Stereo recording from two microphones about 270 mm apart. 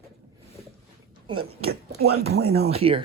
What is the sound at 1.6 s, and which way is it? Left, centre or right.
Speech, right.